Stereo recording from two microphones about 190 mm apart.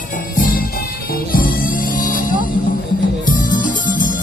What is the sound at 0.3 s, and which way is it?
Music, 50° left (ahead or behind).